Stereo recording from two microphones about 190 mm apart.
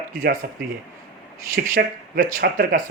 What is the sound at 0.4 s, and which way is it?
Speech, 50° right (ahead or behind).